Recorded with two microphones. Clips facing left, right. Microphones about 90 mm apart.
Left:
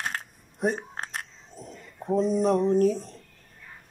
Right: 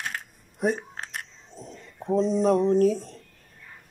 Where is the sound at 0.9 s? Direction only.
40° left (ahead or behind).